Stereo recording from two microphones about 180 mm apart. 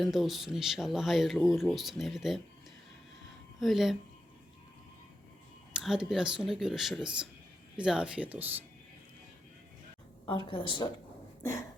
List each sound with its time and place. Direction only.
0.0 s speech: centre (ahead or behind)
3.6 s speech: centre (ahead or behind)
5.7 s speech: 5° right (ahead or behind)
10.2 s a woman's voice: 30° left (ahead or behind)